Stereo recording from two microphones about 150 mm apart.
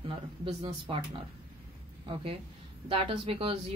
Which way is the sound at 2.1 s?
35° right (ahead or behind).